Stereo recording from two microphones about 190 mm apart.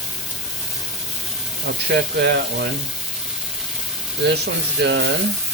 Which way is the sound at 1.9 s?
60° right (ahead or behind).